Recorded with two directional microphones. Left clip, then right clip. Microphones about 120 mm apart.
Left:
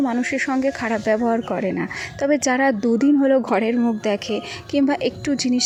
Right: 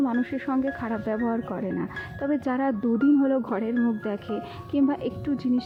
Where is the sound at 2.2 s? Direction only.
25° left (ahead or behind).